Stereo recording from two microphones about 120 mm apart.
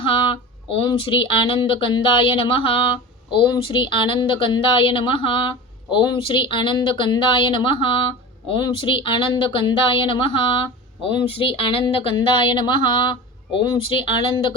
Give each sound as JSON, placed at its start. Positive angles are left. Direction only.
{"t": 0.0, "sound": "speech", "side_deg": 45}